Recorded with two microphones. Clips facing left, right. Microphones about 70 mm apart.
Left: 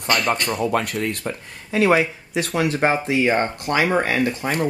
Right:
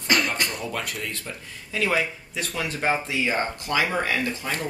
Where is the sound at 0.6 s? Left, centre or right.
Left.